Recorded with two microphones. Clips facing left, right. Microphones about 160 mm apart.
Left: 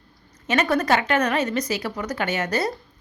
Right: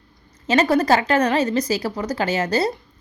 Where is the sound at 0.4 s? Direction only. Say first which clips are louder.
Right 4 dB; 30° right (ahead or behind).